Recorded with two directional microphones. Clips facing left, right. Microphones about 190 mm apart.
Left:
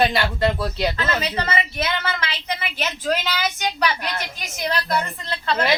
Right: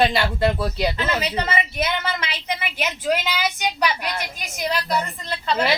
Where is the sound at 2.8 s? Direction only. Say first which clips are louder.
Right 1 dB; 10° right (ahead or behind).